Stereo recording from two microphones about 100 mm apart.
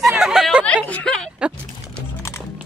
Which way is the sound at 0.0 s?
5° right (ahead or behind).